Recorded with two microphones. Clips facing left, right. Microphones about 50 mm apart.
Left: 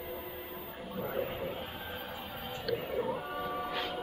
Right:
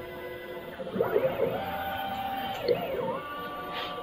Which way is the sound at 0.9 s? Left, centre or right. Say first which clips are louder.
Right 10 dB; right.